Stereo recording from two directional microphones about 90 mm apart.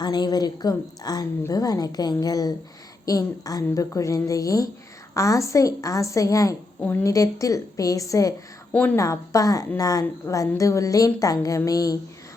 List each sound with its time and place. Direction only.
0.0 s a woman's voice: 50° left (ahead or behind)
6.7 s a woman's voice: 20° left (ahead or behind)
7.0 s a woman's voice: 40° left (ahead or behind)
8.7 s a woman's voice: 15° left (ahead or behind)
9.0 s a woman's voice: 35° left (ahead or behind)